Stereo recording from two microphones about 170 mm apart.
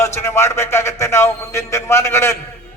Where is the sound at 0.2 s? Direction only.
15° left (ahead or behind).